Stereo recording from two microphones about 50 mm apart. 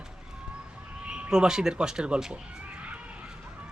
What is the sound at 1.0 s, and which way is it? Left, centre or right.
Speech, centre.